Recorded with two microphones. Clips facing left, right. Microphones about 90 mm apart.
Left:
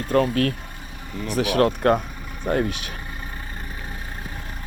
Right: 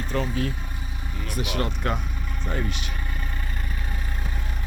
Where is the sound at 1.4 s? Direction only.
90° left.